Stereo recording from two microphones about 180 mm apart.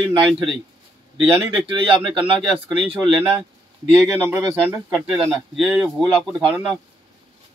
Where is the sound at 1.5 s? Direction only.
30° right (ahead or behind).